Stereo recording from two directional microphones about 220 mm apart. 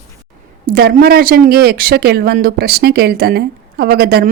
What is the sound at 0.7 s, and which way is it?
Speech, 45° right (ahead or behind).